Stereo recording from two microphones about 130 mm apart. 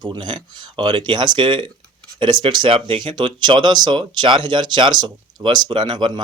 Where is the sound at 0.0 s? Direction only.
35° right (ahead or behind).